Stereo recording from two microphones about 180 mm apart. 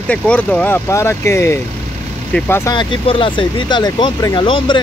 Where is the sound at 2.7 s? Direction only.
25° left (ahead or behind).